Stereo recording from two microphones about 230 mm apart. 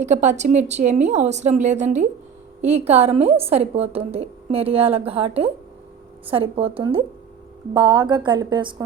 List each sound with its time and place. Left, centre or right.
0.0 s a woman's voice: right